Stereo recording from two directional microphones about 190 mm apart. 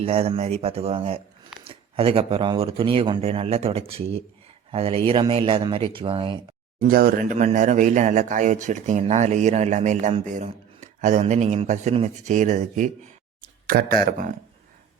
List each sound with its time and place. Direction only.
0.0 s speech: 30° right (ahead or behind)
6.7 s speech: 50° right (ahead or behind)